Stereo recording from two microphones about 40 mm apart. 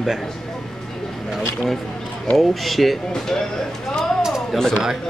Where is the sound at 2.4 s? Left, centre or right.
Centre.